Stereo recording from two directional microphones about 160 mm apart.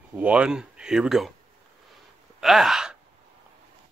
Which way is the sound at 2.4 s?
Centre (ahead or behind).